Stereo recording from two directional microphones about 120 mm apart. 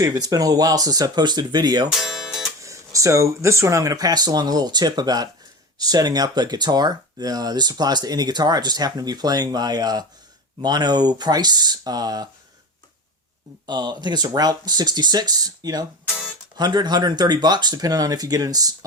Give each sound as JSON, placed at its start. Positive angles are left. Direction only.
{"t": 0.0, "sound": "speech", "side_deg": -30}
{"t": 2.0, "sound": "music", "side_deg": -5}
{"t": 2.6, "sound": "speech", "side_deg": -25}
{"t": 13.7, "sound": "speech", "side_deg": -35}